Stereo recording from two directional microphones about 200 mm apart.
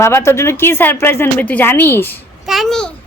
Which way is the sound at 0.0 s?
15° left (ahead or behind).